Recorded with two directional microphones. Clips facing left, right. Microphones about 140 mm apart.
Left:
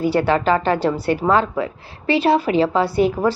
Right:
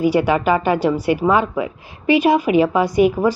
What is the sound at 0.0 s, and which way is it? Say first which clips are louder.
A woman's voice: right 1 dB; 15° right (ahead or behind).